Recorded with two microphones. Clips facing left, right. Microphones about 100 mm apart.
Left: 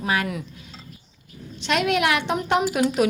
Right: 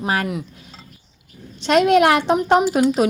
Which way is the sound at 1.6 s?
40° right (ahead or behind).